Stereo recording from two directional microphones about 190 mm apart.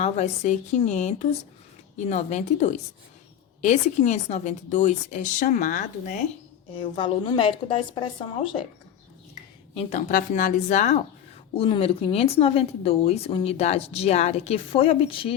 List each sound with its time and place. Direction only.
0.0 s speech: 40° left (ahead or behind)
6.7 s a woman's voice: 30° left (ahead or behind)
9.3 s speech: 40° left (ahead or behind)